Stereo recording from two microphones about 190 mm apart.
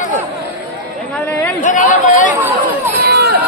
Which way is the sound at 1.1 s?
10° left (ahead or behind).